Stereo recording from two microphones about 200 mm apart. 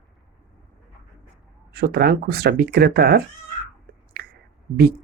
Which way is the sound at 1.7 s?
50° right (ahead or behind).